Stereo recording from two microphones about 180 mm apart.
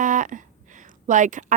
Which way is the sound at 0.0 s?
45° right (ahead or behind).